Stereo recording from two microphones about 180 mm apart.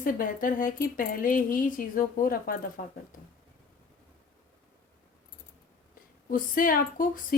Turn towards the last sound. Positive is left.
turn(degrees=50)  # may be behind; listen again after turning